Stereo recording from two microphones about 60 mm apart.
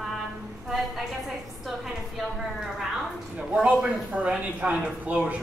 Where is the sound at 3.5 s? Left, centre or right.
Centre.